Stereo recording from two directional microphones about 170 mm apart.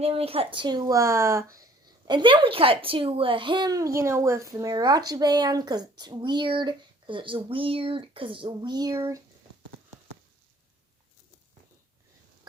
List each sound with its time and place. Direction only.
0.0 s a child's voice: 35° right (ahead or behind); by 1.5 s 15° right (ahead or behind)
2.0 s a child's voice: 25° right (ahead or behind)